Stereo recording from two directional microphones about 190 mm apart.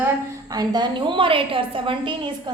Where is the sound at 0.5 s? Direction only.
20° right (ahead or behind).